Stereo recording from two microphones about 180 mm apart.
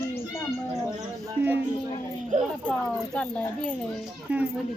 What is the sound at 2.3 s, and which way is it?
Speech, 45° right (ahead or behind).